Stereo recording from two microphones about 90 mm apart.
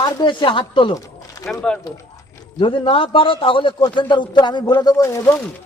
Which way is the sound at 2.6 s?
80° left.